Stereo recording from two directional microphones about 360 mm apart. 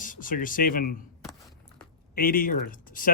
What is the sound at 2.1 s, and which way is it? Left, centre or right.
Speech, left.